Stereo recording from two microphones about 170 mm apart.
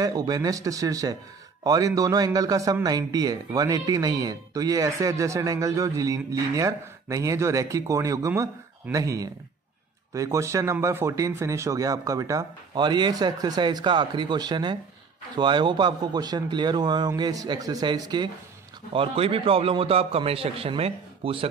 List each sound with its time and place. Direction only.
0.0 s a man's voice: 25° right (ahead or behind)